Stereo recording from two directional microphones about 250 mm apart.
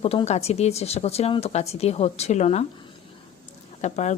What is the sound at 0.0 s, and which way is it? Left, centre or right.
Speech, left.